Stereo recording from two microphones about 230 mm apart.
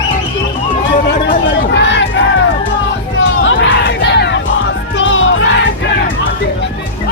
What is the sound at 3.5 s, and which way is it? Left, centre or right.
Crowd, left.